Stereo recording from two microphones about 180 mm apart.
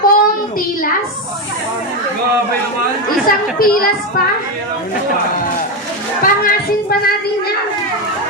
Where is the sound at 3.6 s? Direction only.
55° left (ahead or behind).